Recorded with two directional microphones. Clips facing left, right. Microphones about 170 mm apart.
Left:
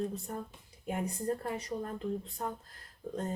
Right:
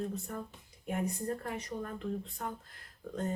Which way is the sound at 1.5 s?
30° left (ahead or behind).